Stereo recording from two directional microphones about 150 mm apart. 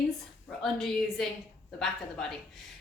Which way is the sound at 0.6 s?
Centre (ahead or behind).